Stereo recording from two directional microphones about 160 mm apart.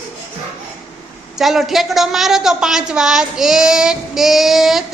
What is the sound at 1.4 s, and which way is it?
A woman's voice, centre (ahead or behind).